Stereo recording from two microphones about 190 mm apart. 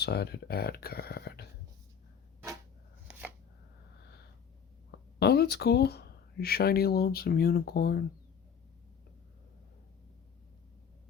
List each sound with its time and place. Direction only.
0.0 s speech: 60° left (ahead or behind)
3.1 s chopping: 5° right (ahead or behind)
4.9 s speech: 60° left (ahead or behind)